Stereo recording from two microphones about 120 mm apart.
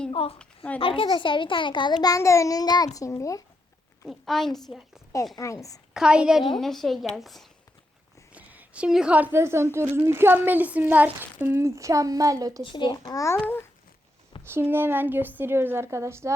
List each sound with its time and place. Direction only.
0.1 s a woman's voice: 50° left (ahead or behind)
0.3 s a woman's voice: 10° left (ahead or behind)
0.8 s a child's voice: 45° left (ahead or behind); by 3.4 s 25° left (ahead or behind)
4.1 s a woman's voice: centre (ahead or behind)
5.4 s a woman's voice: 25° left (ahead or behind)
5.9 s a woman's voice: 5° right (ahead or behind)
8.3 s a woman's voice: 10° right (ahead or behind); by 12.6 s 30° right (ahead or behind)
12.6 s a child's voice: 40° left (ahead or behind)
13.1 s a woman's voice: 25° left (ahead or behind)
13.4 s babbling: 15° left (ahead or behind)
14.5 s speech: 20° right (ahead or behind)